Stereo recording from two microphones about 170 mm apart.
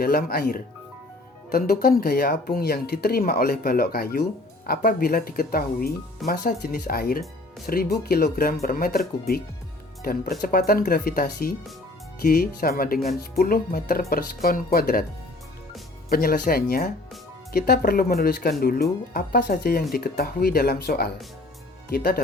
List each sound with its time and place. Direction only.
0.0 s speech: 60° left (ahead or behind)
16.0 s speech: 60° left (ahead or behind)